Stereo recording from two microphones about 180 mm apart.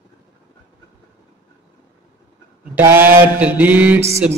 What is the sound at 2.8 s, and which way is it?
Mantra, 10° right (ahead or behind).